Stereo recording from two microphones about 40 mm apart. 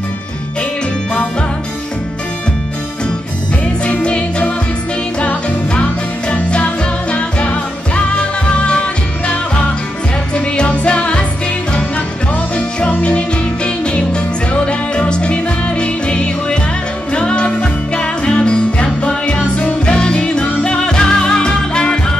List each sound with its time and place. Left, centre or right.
3.8 s music: left
5.8 s music: left
12.5 s music: left